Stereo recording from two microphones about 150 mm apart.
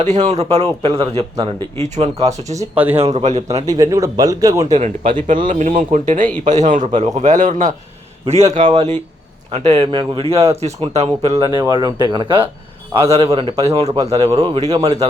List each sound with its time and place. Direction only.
0.0 s speech: 50° right (ahead or behind)
0.4 s speech: 35° right (ahead or behind)
2.7 s speech: 10° right (ahead or behind)
3.0 s speech: 45° right (ahead or behind)
3.7 s speech: 25° right (ahead or behind)
4.7 s speech: 55° right (ahead or behind)
8.3 s speech: 50° right (ahead or behind)
11.3 s speech: 30° right (ahead or behind)
14.3 s speech: 25° right (ahead or behind)